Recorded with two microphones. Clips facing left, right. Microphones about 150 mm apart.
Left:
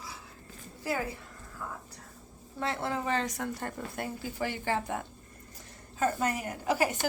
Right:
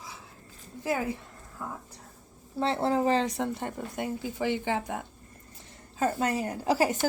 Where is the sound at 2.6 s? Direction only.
30° right (ahead or behind); by 5.0 s 15° right (ahead or behind).